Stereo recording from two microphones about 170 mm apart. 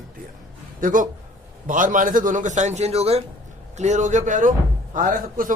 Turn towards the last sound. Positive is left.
turn(degrees=-55)  # may be behind; listen again after turning